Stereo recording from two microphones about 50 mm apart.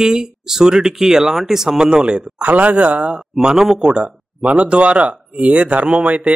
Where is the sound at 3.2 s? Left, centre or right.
Centre.